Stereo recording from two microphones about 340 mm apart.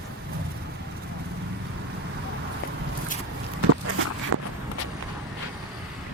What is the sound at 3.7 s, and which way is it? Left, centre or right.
Walk, right.